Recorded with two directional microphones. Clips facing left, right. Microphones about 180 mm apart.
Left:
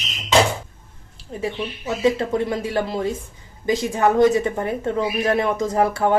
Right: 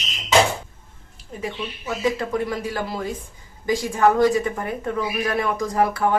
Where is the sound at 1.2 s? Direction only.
30° left (ahead or behind).